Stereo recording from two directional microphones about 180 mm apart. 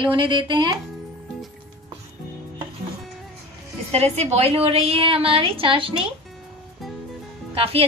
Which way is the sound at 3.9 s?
35° right (ahead or behind).